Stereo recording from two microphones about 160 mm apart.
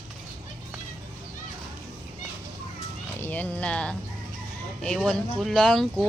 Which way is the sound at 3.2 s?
10° left (ahead or behind).